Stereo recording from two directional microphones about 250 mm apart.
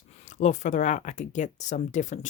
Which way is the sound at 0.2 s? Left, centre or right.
Left.